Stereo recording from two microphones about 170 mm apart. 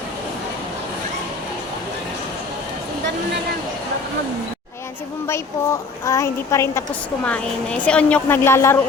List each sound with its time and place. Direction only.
6.1 s a woman's voice: 15° left (ahead or behind)
7.3 s a woman's voice: 5° left (ahead or behind)